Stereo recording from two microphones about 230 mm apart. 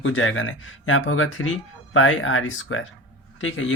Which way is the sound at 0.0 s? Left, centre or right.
Left.